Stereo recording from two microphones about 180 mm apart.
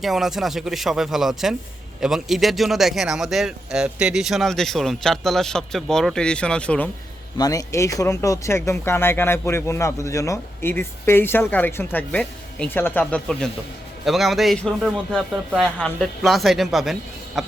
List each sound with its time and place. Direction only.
0.0 s speech: centre (ahead or behind)
7.3 s speech: 20° left (ahead or behind); by 17.4 s centre (ahead or behind)